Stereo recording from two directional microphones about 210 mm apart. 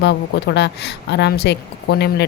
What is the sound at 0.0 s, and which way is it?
A woman's voice, 55° left (ahead or behind).